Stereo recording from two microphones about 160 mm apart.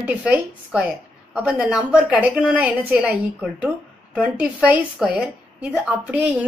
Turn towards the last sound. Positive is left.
turn(degrees=-10)  # may be behind; listen again after turning